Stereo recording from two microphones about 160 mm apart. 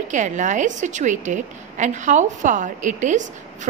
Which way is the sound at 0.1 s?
50° right (ahead or behind).